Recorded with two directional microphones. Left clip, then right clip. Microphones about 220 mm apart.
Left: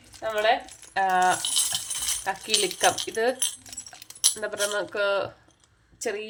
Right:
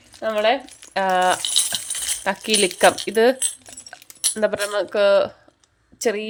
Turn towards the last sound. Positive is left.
turn(degrees=-40)  # may be behind; listen again after turning